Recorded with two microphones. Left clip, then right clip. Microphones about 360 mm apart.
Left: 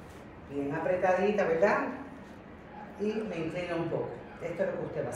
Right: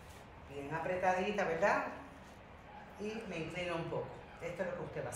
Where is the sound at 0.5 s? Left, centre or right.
Centre.